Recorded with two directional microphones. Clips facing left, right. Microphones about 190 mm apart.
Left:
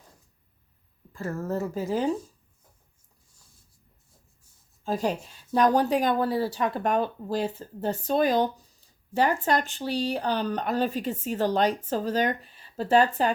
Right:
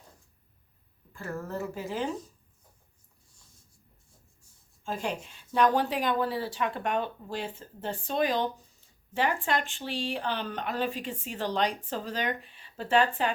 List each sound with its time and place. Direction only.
1.1 s speech: 40° left (ahead or behind)
4.8 s speech: 35° left (ahead or behind)